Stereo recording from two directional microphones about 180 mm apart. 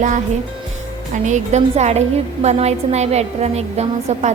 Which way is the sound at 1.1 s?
40° right (ahead or behind).